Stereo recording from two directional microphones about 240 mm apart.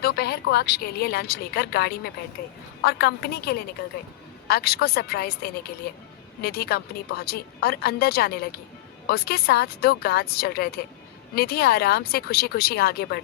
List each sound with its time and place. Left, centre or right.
0.0 s a woman's voice: left